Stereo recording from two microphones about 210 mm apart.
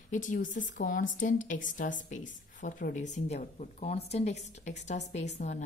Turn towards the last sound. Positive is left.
turn(degrees=35)  # may be behind; listen again after turning